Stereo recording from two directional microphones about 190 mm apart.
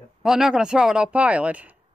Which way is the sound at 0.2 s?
Centre (ahead or behind).